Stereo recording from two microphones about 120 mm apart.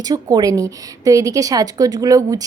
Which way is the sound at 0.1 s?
35° right (ahead or behind).